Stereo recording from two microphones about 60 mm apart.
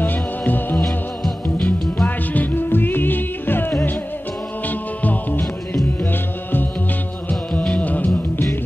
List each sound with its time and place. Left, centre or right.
0.0 s music: left
0.8 s music: centre
2.0 s music: left
7.8 s music: left